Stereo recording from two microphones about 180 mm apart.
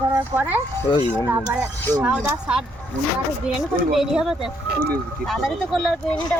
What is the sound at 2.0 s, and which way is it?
Speech, 5° right (ahead or behind).